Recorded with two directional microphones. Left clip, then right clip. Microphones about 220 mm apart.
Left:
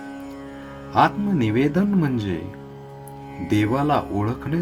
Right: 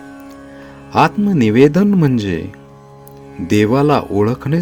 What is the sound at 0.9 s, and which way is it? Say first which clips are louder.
Speech: right 5 dB; 50° right (ahead or behind).